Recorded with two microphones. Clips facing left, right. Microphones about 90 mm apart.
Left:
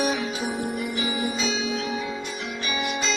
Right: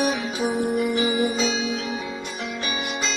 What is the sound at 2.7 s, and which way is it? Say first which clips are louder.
Music: left 3 dB; 40° right (ahead or behind).